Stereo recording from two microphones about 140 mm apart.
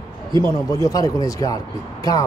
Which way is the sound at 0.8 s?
25° left (ahead or behind).